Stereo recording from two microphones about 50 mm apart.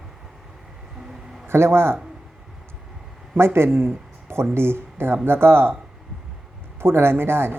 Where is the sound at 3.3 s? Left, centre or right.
Right.